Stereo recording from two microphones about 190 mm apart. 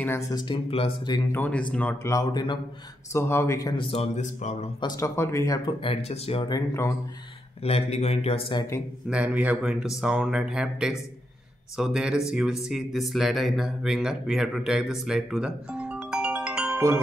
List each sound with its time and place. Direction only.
0.0 s speech: 15° left (ahead or behind)
1.3 s speech: 10° left (ahead or behind)
3.9 s speech: 35° left (ahead or behind)
4.7 s speech: 20° left (ahead or behind)
5.9 s speech: 30° left (ahead or behind)
7.6 s speech: 35° left (ahead or behind)
9.1 s speech: 5° right (ahead or behind)